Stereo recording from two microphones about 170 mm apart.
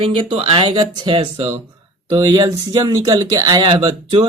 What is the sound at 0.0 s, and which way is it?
Speech, 30° right (ahead or behind).